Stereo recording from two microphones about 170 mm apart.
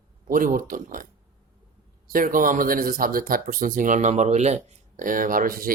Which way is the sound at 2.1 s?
55° right (ahead or behind).